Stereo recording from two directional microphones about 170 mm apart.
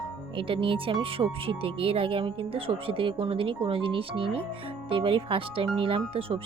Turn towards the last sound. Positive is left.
turn(degrees=-30)  # may be behind; listen again after turning